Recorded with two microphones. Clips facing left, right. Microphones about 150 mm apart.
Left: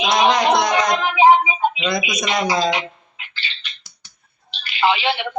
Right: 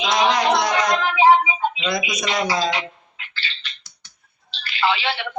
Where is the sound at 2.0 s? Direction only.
15° left (ahead or behind).